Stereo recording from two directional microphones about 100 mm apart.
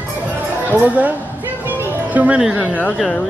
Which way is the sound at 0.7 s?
15° right (ahead or behind).